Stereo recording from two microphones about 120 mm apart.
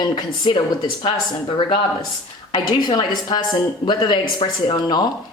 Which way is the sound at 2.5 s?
40° left (ahead or behind).